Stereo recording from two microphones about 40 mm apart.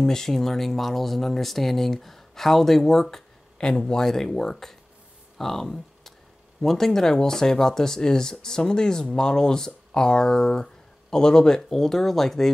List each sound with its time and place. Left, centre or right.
0.0 s speech: centre
3.5 s speech: left